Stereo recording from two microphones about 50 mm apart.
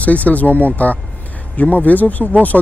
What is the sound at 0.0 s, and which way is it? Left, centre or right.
Speech, left.